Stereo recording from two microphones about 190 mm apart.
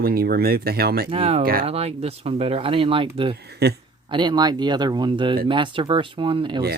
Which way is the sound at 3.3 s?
60° right (ahead or behind).